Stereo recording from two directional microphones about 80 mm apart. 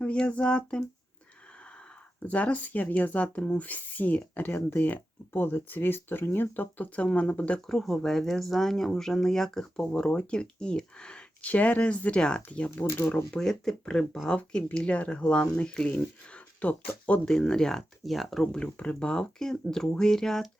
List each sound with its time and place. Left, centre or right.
0.0 s speech: centre
2.2 s speech: centre
7.7 s speech: centre
12.7 s speech: left
13.3 s speech: centre